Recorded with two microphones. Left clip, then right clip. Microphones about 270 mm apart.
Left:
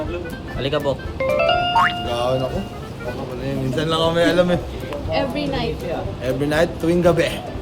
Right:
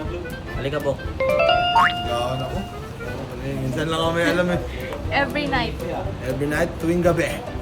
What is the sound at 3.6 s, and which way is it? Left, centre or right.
A man's voice, centre.